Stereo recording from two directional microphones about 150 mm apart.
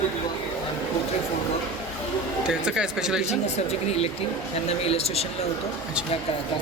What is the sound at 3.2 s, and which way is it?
Speech, 45° left (ahead or behind).